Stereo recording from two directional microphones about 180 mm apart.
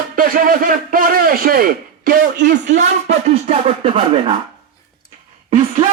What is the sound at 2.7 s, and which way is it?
Speech, 40° right (ahead or behind).